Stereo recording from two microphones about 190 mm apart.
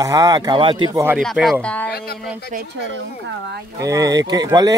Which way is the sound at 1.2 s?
Centre (ahead or behind).